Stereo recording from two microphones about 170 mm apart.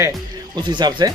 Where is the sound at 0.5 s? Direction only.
25° right (ahead or behind).